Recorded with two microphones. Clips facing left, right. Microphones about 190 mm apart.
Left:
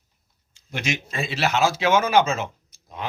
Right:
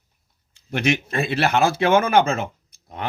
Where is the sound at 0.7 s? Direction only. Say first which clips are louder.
Right 7 dB; 60° right (ahead or behind).